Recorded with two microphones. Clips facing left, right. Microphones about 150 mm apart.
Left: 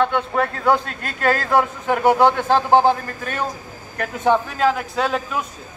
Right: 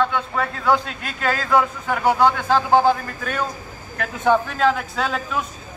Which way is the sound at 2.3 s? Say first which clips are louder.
Left 1 dB; 30° left (ahead or behind).